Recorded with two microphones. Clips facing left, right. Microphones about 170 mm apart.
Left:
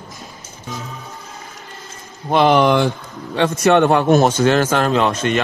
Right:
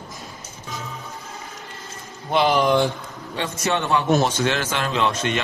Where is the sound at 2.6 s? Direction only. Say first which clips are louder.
Left 4 dB; 80° left.